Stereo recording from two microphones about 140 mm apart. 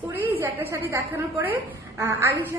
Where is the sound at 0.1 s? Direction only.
15° right (ahead or behind).